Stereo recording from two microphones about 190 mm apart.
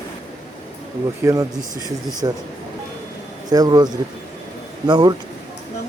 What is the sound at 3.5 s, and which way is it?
Speech, 20° right (ahead or behind).